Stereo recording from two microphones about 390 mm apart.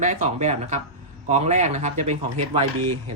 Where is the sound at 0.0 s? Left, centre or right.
Centre.